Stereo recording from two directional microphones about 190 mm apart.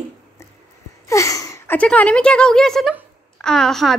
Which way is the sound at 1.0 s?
15° left (ahead or behind).